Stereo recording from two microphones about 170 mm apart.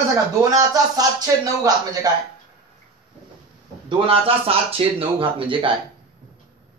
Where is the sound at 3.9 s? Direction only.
30° right (ahead or behind).